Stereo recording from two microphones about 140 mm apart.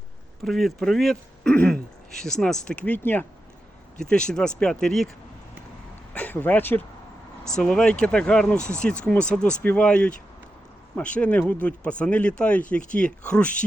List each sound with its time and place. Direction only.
0.4 s speech: centre (ahead or behind)
6.1 s speech: 10° left (ahead or behind)
8.5 s speech: 20° right (ahead or behind)
8.8 s speech: 5° left (ahead or behind)